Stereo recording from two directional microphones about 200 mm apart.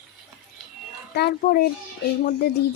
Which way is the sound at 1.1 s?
50° left (ahead or behind).